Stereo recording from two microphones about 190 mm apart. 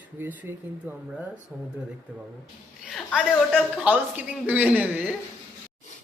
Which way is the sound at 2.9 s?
Centre (ahead or behind).